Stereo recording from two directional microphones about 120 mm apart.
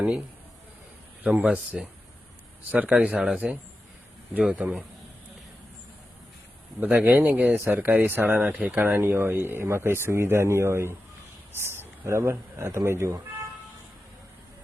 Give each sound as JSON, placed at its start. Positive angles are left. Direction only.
{"t": 1.2, "sound": "speech", "side_deg": -10}
{"t": 7.0, "sound": "speech", "side_deg": -15}